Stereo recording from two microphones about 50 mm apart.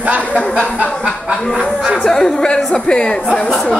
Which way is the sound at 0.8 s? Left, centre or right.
Centre.